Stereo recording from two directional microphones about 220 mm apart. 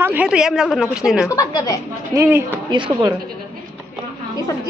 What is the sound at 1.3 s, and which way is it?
Speech, 15° left (ahead or behind).